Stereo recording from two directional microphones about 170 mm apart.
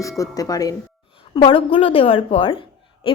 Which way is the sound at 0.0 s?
20° left (ahead or behind).